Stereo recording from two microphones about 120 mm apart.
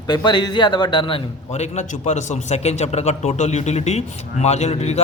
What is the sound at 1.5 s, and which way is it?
A man's voice, 70° left (ahead or behind).